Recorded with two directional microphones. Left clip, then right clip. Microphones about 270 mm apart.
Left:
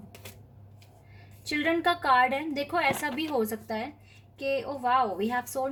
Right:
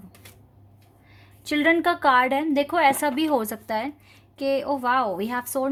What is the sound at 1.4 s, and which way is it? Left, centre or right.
Speech, right.